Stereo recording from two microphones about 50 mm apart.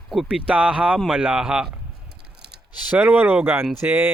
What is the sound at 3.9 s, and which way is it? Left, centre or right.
Speech, right.